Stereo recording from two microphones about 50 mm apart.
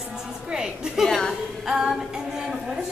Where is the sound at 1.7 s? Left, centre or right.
Centre.